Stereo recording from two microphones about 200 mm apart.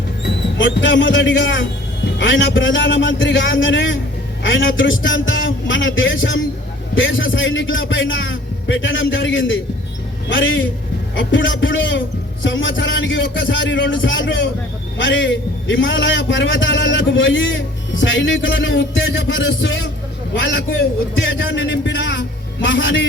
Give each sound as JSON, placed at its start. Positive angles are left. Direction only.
{"t": 0.6, "sound": "a man's voice", "side_deg": 70}